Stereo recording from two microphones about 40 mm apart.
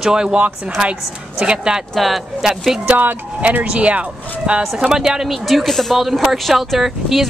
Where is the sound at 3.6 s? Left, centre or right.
Right.